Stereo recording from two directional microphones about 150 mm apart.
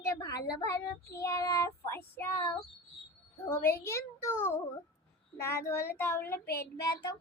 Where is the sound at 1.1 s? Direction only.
20° left (ahead or behind).